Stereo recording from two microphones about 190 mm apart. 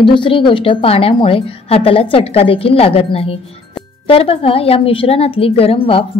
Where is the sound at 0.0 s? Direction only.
25° left (ahead or behind).